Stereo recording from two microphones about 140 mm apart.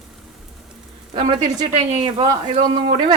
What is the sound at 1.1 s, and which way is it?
Speech, 35° right (ahead or behind).